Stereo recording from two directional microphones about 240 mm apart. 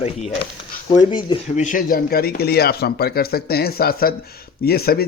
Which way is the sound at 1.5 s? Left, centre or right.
Left.